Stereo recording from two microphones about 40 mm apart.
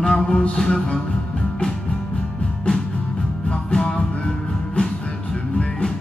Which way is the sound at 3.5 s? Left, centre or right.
Left.